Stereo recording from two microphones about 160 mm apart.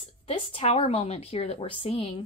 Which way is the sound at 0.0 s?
35° left (ahead or behind).